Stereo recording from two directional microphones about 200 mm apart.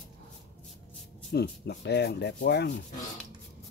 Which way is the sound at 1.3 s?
55° left (ahead or behind).